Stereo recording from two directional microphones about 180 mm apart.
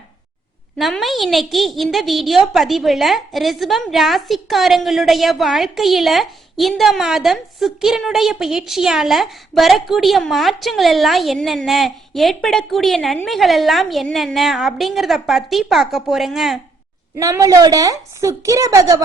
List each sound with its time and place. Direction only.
0.8 s a woman's voice: centre (ahead or behind)
17.2 s a woman's voice: 20° right (ahead or behind)